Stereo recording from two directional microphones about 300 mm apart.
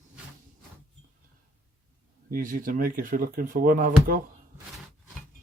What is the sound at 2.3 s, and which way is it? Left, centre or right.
Speech, right.